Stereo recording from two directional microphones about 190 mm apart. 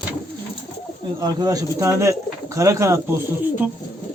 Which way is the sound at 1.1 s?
20° right (ahead or behind).